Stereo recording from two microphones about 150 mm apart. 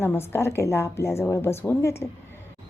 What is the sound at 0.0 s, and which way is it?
Speech, 15° left (ahead or behind).